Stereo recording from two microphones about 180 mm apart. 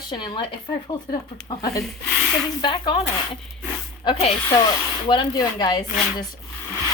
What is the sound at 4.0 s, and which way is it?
Speech, 30° left (ahead or behind).